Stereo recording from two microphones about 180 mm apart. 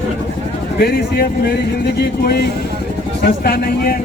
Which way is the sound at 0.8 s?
60° left (ahead or behind).